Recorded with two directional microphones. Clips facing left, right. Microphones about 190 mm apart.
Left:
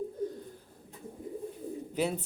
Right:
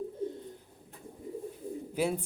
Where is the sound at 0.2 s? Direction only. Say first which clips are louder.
Even; 25° right (ahead or behind).